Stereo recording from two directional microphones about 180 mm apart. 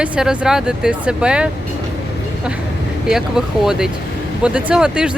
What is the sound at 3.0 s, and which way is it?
Speech, 5° right (ahead or behind).